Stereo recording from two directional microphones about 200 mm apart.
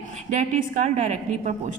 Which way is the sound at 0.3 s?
40° right (ahead or behind).